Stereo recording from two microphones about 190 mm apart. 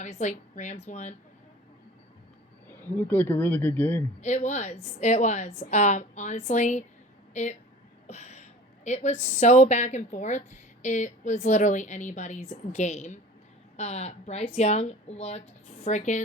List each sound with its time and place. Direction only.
0.0 s a woman's voice: 40° left (ahead or behind)
2.6 s speech: 10° left (ahead or behind)
4.2 s a woman's voice: 35° left (ahead or behind)
8.0 s a sound: 35° left (ahead or behind)
9.4 s a woman's voice: 35° left (ahead or behind)